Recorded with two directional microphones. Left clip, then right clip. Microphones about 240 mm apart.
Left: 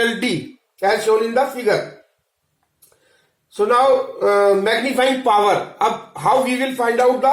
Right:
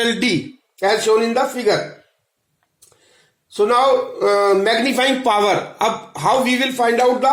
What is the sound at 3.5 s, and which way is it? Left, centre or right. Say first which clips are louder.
A man's voice: even; right.